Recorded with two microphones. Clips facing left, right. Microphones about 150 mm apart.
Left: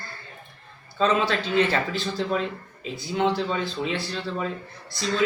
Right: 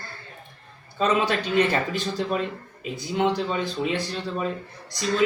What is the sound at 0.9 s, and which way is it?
Speech, 15° right (ahead or behind).